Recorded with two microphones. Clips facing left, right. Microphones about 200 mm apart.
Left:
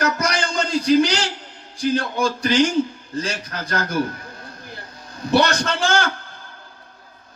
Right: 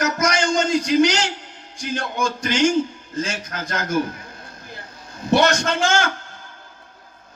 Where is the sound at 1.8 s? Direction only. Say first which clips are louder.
Left 4 dB; 35° left (ahead or behind).